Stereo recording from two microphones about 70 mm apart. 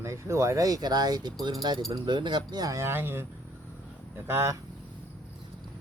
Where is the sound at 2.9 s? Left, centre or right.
Right.